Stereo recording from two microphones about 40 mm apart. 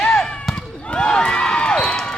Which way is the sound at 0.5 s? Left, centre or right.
Left.